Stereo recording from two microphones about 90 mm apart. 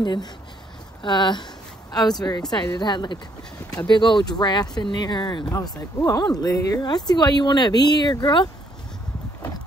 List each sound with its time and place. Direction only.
0.0 s speech: 55° left (ahead or behind)
5.5 s speech: 40° left (ahead or behind); by 8.5 s 55° left (ahead or behind)